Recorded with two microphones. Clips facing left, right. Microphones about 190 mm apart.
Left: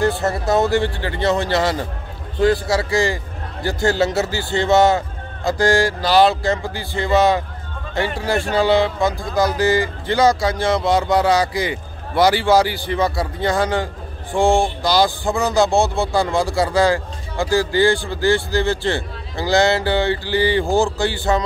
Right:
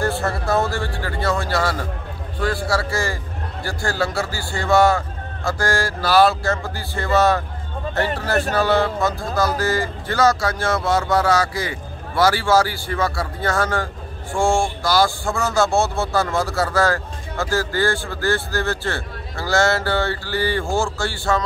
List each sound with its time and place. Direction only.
0.2 s a man's voice: 20° left (ahead or behind)